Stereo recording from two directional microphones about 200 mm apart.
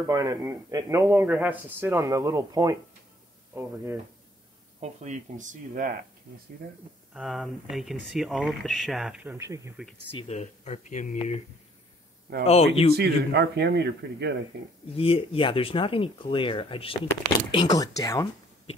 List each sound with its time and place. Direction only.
0.0 s a man's voice: 15° right (ahead or behind)
4.7 s speech: 35° right (ahead or behind)
7.2 s speech: centre (ahead or behind)
10.1 s speech: 35° left (ahead or behind)
12.4 s speech: 30° left (ahead or behind)
12.9 s a man's voice: 55° right (ahead or behind)
15.0 s speech: 25° left (ahead or behind)